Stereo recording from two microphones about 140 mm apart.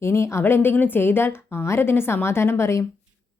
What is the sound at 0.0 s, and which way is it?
Speech, 20° left (ahead or behind).